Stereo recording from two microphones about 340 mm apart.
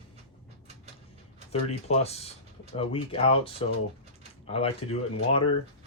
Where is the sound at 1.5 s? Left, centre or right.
Centre.